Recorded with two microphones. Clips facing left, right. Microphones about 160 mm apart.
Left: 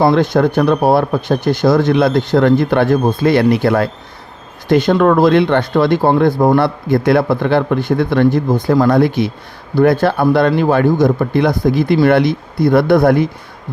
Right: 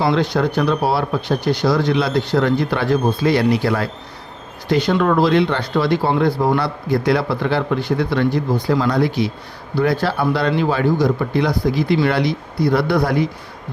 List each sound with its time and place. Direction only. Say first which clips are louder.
0.0 s speech: left 6 dB; 50° left (ahead or behind)